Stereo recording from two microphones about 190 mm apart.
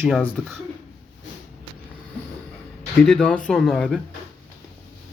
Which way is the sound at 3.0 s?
5° left (ahead or behind).